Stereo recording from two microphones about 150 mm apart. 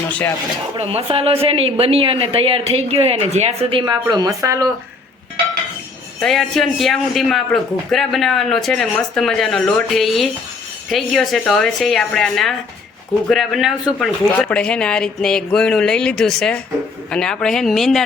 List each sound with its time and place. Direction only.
0.8 s speech: 40° right (ahead or behind)
4.1 s speech: 25° right (ahead or behind)
6.1 s a man's voice: centre (ahead or behind)